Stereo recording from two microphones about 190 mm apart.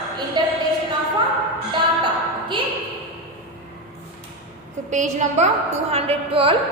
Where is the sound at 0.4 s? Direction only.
25° right (ahead or behind).